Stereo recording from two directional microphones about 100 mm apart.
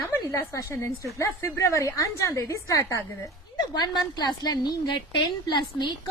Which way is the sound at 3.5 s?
45° left (ahead or behind).